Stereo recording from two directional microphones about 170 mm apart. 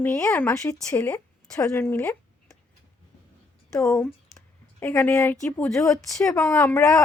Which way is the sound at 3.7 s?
20° left (ahead or behind).